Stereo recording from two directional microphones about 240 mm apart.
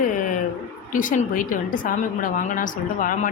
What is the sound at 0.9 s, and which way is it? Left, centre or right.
Speech, left.